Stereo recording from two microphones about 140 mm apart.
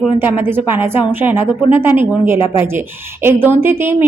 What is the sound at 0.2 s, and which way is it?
A woman's voice, 15° right (ahead or behind).